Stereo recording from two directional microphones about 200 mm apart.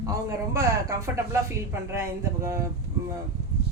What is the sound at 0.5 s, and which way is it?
A woman's voice, 15° right (ahead or behind).